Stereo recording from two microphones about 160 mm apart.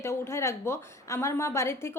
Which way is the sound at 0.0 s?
15° left (ahead or behind).